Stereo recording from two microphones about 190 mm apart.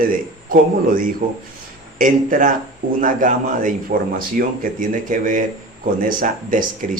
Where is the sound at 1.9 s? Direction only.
45° right (ahead or behind).